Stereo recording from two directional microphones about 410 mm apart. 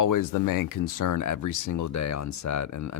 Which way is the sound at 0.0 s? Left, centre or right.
Left.